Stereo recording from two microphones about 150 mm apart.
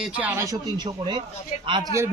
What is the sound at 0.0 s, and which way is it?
Speech, 10° right (ahead or behind).